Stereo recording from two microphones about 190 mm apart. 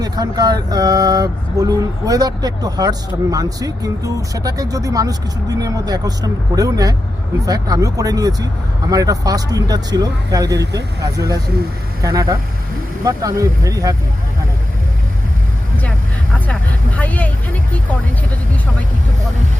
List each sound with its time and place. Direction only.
0.0 s speech: 20° right (ahead or behind)
17.0 s speech: 10° left (ahead or behind)